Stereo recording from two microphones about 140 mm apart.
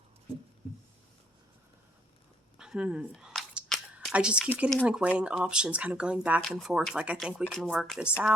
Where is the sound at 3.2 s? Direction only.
5° right (ahead or behind).